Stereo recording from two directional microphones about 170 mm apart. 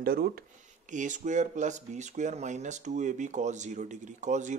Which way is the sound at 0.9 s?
45° right (ahead or behind).